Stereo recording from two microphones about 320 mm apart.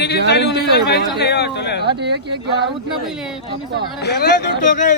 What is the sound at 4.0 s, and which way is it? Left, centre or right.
Speech, left.